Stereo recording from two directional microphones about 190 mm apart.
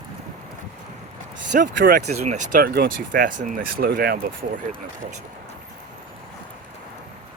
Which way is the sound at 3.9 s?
55° right (ahead or behind).